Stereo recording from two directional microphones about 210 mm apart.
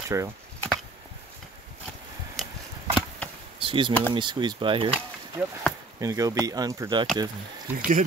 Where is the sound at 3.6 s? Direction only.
25° right (ahead or behind).